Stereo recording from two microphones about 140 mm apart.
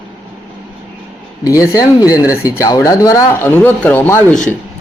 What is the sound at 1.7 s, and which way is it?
Speech, 25° left (ahead or behind).